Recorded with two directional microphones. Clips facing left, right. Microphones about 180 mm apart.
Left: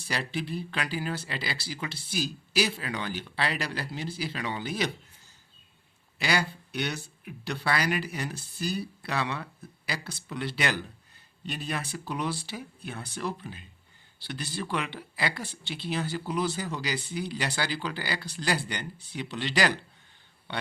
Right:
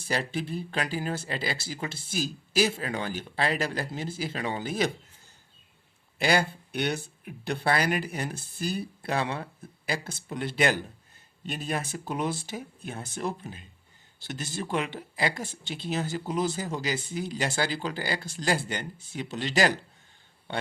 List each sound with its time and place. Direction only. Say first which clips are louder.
0.1 s speech: right 2 dB; 45° right (ahead or behind)
6.1 s a man's voice: right 4 dB; 50° right (ahead or behind)